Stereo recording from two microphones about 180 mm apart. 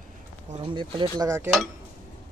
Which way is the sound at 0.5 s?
30° right (ahead or behind).